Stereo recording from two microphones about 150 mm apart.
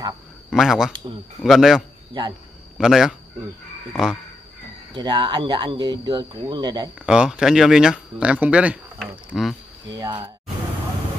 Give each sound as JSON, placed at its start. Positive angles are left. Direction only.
{"t": 0.5, "sound": "speech", "side_deg": 0}
{"t": 4.9, "sound": "speech", "side_deg": -30}
{"t": 7.0, "sound": "speech", "side_deg": -5}
{"t": 9.8, "sound": "speech", "side_deg": -30}